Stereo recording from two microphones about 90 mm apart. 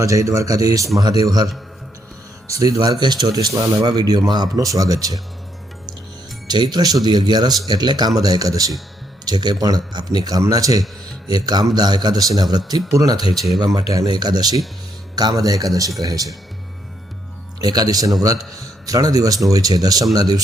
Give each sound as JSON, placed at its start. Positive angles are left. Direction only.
{"t": 0.0, "sound": "a man's voice", "side_deg": -35}
{"t": 2.5, "sound": "a man's voice", "side_deg": -40}
{"t": 6.5, "sound": "a man's voice", "side_deg": -50}
{"t": 17.6, "sound": "a man's voice", "side_deg": -45}